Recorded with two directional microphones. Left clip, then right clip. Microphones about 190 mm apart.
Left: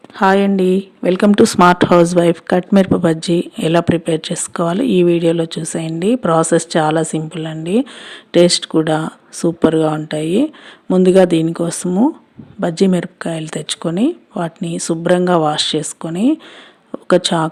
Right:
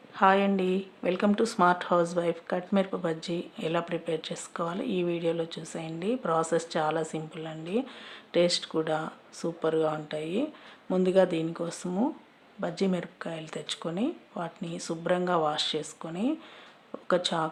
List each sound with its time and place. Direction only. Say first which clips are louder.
0.2 s speech: left 10 dB; 35° left (ahead or behind)